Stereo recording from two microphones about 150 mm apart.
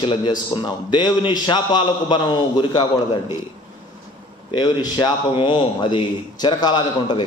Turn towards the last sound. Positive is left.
turn(degrees=30)  # may be behind; listen again after turning